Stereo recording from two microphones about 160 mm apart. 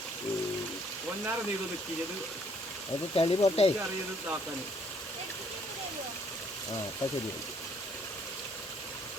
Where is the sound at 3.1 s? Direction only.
35° left (ahead or behind).